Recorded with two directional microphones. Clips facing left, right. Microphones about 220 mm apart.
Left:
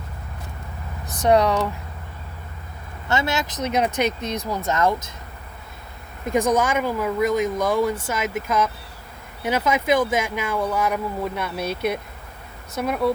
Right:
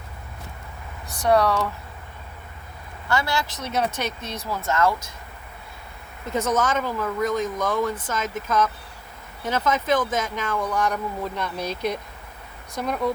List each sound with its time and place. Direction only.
1.3 s speech: 20° left (ahead or behind)
3.1 s speech: 20° left (ahead or behind)
6.2 s speech: 15° left (ahead or behind)